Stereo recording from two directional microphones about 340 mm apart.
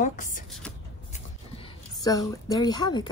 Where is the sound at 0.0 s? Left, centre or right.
Left.